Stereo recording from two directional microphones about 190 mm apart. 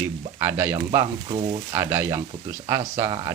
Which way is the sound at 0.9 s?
25° right (ahead or behind).